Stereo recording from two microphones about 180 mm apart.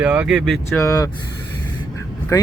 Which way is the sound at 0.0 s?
10° right (ahead or behind).